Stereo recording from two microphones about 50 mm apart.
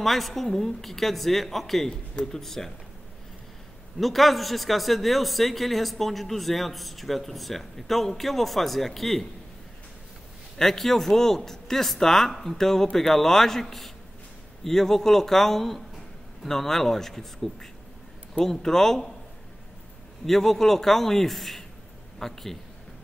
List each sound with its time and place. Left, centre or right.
0.0 s a man's voice: centre
1.9 s speech: centre
2.4 s speech: centre
4.0 s a man's voice: centre
10.6 s speech: centre
20.2 s speech: centre